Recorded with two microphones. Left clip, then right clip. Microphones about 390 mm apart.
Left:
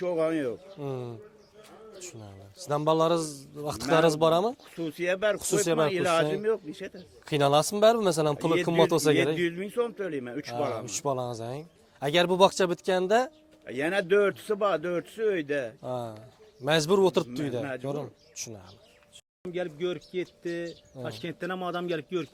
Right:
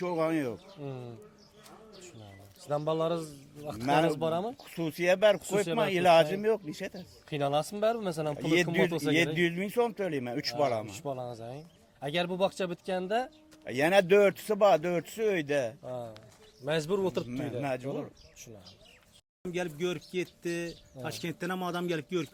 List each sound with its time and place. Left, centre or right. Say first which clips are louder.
0.0 s speech: left 3 dB; centre
0.8 s a man's voice: left 7 dB; left
2.6 s a man's voice: left 6 dB; left
4.6 s a man's voice: right 1 dB; right
7.3 s a man's voice: left 7 dB; left
9.1 s a man's voice: left 2 dB; right
10.8 s a man's voice: left 7 dB; left
13.7 s a man's voice: right 2 dB; right
15.8 s a man's voice: left 5 dB; left
17.6 s a man's voice: right 1 dB; right
18.4 s a man's voice: left 12 dB; left
19.5 s speech: left 2 dB; centre